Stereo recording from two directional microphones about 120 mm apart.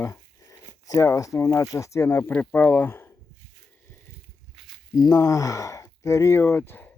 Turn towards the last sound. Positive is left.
turn(degrees=15)  # may be behind; listen again after turning